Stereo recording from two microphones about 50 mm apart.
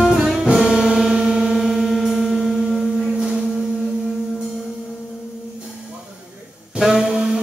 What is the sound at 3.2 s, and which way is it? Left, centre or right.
Vehicle, centre.